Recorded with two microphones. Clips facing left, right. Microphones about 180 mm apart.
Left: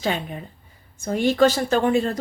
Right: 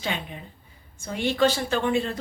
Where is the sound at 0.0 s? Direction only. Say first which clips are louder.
Left 6 dB; 40° left (ahead or behind).